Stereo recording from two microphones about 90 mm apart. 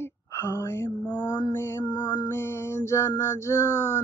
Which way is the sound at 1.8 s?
50° left (ahead or behind).